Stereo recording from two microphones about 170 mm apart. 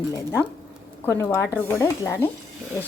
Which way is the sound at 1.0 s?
15° left (ahead or behind).